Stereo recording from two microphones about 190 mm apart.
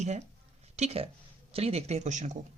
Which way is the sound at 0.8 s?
30° right (ahead or behind).